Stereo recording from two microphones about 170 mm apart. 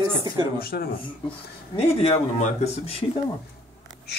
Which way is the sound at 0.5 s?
65° left (ahead or behind).